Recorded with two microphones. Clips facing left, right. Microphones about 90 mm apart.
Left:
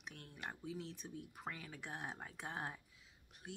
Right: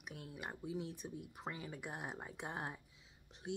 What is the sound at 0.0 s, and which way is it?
Speech, 10° right (ahead or behind).